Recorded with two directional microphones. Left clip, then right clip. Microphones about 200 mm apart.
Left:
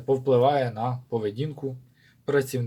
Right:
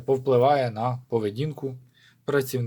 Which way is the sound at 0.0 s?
25° right (ahead or behind).